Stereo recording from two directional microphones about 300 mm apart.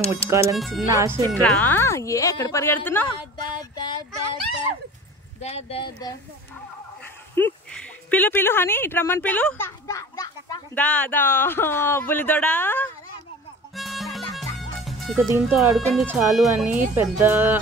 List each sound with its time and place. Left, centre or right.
0.3 s music: centre
0.6 s speech: centre
0.8 s music: centre
1.3 s a woman's voice: centre
5.4 s speech: left
7.3 s speech: centre
13.7 s music: centre